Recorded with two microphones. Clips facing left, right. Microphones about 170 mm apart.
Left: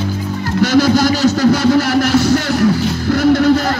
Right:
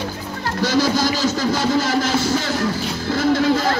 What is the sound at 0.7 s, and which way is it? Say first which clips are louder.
Music: left 6 dB; 70° left (ahead or behind).